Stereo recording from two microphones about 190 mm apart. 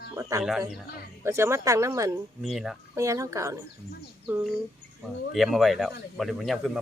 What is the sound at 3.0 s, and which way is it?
Speech, 15° right (ahead or behind).